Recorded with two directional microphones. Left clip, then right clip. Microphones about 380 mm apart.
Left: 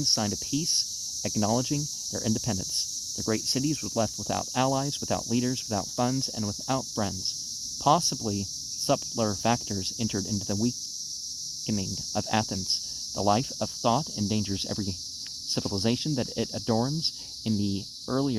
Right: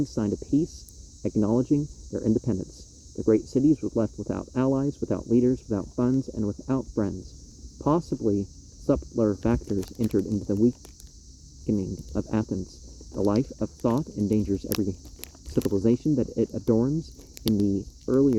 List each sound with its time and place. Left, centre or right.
0.1 s speech: centre